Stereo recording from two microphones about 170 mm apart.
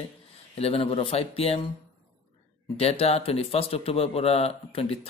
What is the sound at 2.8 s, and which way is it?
Speech, 35° left (ahead or behind).